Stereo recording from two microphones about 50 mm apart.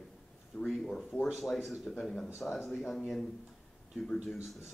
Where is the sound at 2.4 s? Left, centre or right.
Centre.